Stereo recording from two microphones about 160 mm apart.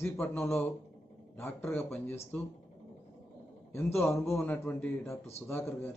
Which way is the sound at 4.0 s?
15° left (ahead or behind).